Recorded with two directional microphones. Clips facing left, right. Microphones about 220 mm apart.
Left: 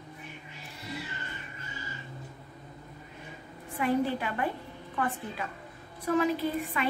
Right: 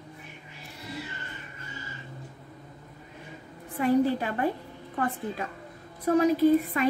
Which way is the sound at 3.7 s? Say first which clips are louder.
Right 5 dB; 40° right (ahead or behind).